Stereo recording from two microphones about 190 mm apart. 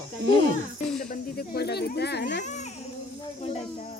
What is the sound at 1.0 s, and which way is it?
Speech, 45° left (ahead or behind).